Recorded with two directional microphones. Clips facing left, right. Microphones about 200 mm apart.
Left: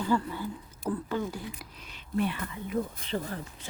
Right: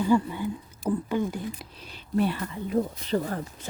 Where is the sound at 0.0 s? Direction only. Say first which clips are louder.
Right 5 dB; 15° right (ahead or behind).